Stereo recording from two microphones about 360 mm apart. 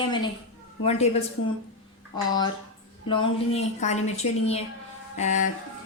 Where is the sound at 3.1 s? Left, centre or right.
Centre.